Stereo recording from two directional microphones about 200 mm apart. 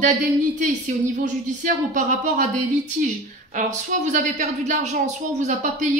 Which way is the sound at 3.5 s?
40° right (ahead or behind).